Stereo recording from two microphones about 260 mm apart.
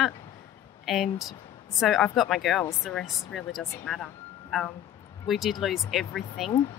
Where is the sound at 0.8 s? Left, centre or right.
Centre.